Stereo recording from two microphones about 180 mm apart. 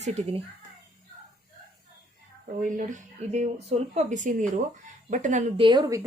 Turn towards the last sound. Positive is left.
turn(degrees=-25)  # may be behind; listen again after turning